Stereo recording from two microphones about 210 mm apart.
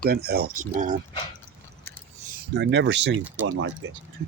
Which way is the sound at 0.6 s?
35° right (ahead or behind).